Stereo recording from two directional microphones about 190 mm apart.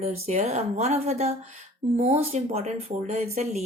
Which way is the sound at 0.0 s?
35° right (ahead or behind).